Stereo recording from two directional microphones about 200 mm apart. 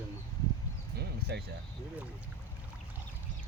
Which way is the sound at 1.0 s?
55° right (ahead or behind).